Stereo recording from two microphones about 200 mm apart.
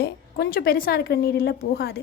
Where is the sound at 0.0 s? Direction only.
50° left (ahead or behind).